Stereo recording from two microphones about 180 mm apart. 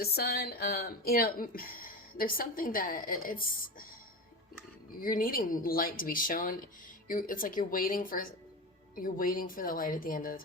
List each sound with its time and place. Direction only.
0.0 s speech: 60° left (ahead or behind)
4.9 s speech: 50° left (ahead or behind)